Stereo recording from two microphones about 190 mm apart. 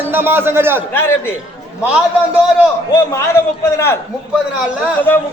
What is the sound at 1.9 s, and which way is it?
Speech, 5° right (ahead or behind).